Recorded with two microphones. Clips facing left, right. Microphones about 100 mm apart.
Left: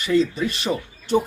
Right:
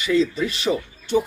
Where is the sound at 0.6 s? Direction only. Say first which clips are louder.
Right 2 dB; 40° left (ahead or behind).